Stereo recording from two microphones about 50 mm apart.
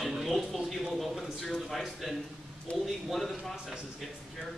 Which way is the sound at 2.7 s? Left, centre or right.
Left.